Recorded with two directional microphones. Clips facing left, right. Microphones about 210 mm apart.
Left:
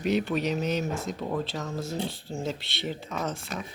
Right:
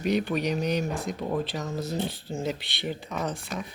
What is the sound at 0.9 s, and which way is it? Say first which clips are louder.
Speech: right 1 dB; 10° right (ahead or behind).